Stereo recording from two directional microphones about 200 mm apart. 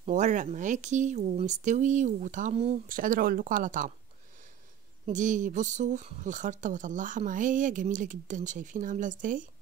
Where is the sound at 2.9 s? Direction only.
45° right (ahead or behind).